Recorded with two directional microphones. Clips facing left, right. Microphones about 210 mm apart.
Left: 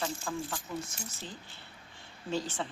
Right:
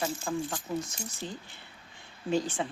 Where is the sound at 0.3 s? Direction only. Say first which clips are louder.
Right 6 dB; 15° right (ahead or behind).